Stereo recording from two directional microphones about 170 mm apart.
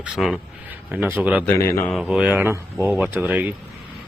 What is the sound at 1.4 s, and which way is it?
Speech, 15° left (ahead or behind).